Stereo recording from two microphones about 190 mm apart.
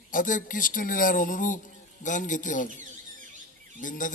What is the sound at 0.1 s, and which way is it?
Speech, 45° left (ahead or behind).